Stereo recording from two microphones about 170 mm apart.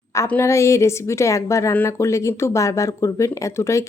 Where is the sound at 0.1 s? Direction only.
15° left (ahead or behind).